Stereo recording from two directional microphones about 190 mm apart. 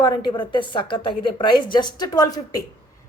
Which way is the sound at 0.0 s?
25° left (ahead or behind).